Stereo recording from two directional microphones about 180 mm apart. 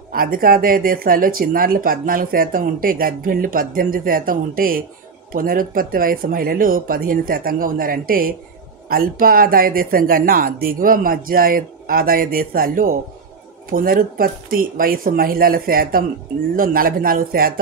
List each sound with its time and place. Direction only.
0.1 s speech: 55° right (ahead or behind)